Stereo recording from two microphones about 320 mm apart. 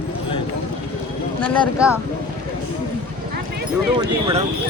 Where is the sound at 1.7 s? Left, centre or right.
Centre.